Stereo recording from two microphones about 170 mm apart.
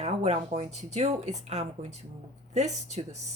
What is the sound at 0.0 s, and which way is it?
Speech, 40° right (ahead or behind).